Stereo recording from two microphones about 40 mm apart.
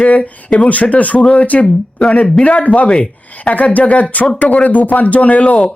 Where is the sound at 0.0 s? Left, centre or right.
Left.